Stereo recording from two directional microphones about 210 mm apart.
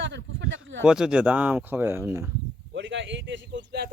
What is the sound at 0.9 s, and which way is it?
Speech, 5° right (ahead or behind).